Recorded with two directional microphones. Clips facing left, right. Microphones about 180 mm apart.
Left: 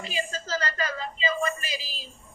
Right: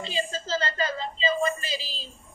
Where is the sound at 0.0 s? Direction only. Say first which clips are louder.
Right 2 dB; 25° right (ahead or behind).